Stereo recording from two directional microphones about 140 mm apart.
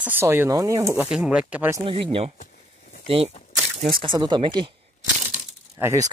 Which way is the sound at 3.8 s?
40° right (ahead or behind).